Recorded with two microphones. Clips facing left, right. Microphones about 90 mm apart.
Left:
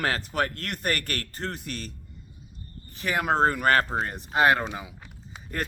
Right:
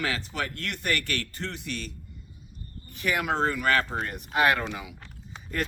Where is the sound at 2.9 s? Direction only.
35° left (ahead or behind).